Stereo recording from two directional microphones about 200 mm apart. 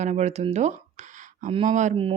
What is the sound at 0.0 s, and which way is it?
Speech, 35° right (ahead or behind).